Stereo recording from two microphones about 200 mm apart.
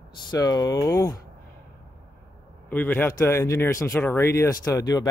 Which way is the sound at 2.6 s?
10° left (ahead or behind).